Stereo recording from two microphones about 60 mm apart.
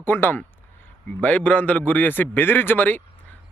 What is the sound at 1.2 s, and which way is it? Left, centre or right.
Speech, left.